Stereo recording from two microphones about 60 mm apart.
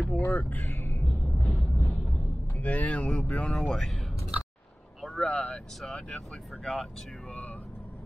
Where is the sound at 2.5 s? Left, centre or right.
Left; by 4.1 s centre.